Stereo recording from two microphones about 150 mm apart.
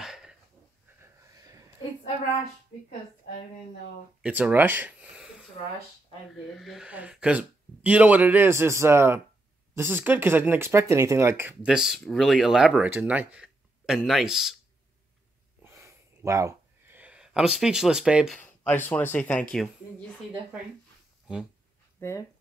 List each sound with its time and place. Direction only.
0.0 s dog: 5° right (ahead or behind)
1.0 s a sound: 20° right (ahead or behind)
4.2 s speech: 10° right (ahead or behind)
6.6 s speech: centre (ahead or behind)
15.6 s a sound: 15° right (ahead or behind)
17.0 s speech: 5° right (ahead or behind)
18.4 s speech: 10° left (ahead or behind)
22.0 s speech: 15° left (ahead or behind)